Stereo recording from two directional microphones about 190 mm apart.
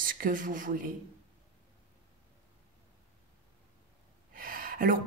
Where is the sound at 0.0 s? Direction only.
45° right (ahead or behind).